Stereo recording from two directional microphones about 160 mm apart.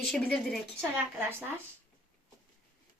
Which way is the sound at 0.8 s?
15° right (ahead or behind).